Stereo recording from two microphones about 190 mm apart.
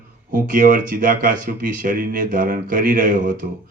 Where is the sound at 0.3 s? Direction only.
45° right (ahead or behind).